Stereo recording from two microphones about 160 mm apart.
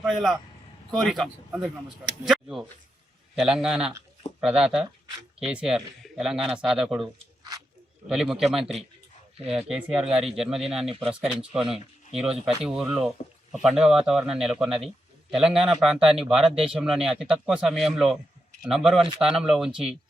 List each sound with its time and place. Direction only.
0.0 s a man's voice: centre (ahead or behind)